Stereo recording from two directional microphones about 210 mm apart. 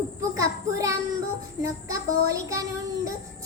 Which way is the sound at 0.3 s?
15° right (ahead or behind).